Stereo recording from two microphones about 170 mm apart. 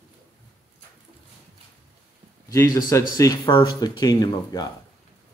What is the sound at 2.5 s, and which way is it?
Speech, 20° left (ahead or behind).